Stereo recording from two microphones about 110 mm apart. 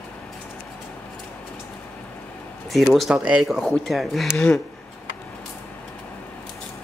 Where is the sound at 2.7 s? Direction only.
Centre (ahead or behind).